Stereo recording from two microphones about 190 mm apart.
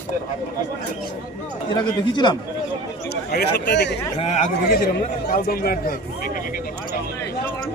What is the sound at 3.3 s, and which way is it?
Speech, 55° left (ahead or behind).